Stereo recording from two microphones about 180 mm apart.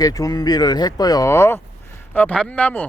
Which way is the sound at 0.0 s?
20° left (ahead or behind).